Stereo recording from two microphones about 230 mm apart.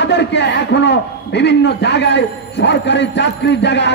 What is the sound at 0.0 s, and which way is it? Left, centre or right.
A man's voice, left.